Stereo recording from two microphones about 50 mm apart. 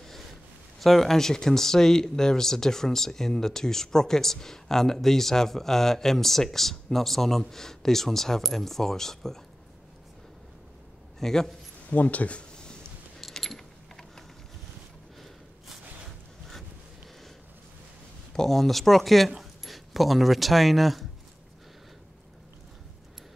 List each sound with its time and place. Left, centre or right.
0.7 s speech: centre
11.1 s speech: centre
11.9 s speech: left
13.2 s keys jangling: centre
18.3 s speech: centre